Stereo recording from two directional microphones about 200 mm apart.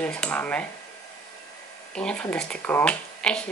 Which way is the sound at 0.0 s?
5° left (ahead or behind).